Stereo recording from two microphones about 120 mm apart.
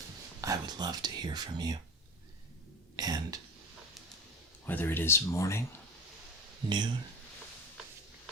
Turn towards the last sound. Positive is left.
turn(degrees=-40)  # may be behind; listen again after turning